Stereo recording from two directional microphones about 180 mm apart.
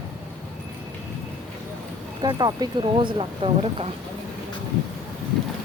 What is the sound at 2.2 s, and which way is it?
Speech, 25° right (ahead or behind).